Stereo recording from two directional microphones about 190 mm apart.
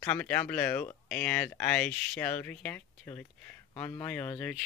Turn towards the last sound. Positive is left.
turn(degrees=5)  # may be behind; listen again after turning